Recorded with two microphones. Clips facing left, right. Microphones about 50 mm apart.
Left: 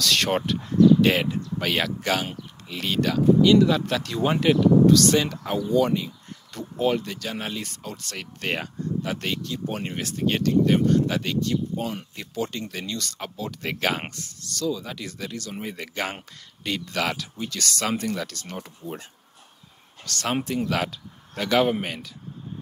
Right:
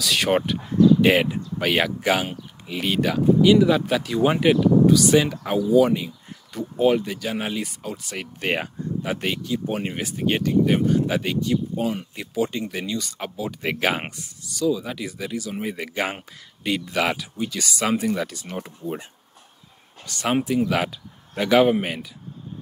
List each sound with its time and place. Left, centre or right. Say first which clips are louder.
0.0 s speech: right 2 dB; centre
20.1 s speech: right 4 dB; centre